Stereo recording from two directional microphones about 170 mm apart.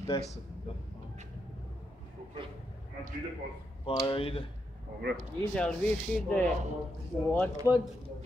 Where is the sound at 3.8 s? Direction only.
30° left (ahead or behind).